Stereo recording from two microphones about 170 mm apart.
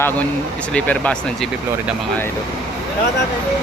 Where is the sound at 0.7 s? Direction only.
5° left (ahead or behind).